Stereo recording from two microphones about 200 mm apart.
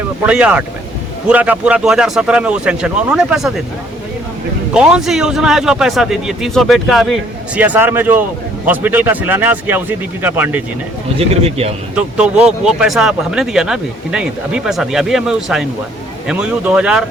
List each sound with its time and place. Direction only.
0.3 s speech: 5° right (ahead or behind)
4.7 s speech: 5° right (ahead or behind)
11.4 s speech: 30° right (ahead or behind)
11.9 s speech: 5° right (ahead or behind)